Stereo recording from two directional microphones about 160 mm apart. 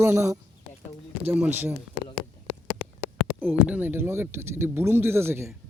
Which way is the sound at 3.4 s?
10° right (ahead or behind).